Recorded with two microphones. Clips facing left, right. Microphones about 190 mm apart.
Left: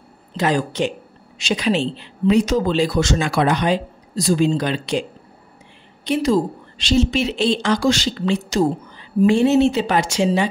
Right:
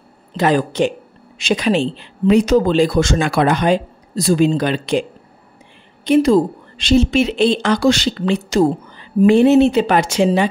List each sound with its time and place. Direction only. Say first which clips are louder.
0.4 s speech: right 4 dB; 55° right (ahead or behind)
6.0 s speech: right 6 dB; 55° right (ahead or behind)